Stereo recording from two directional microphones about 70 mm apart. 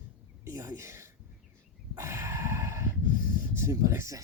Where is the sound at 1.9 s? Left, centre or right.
Right.